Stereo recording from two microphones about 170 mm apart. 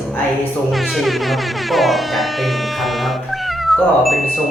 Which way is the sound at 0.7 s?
Centre (ahead or behind).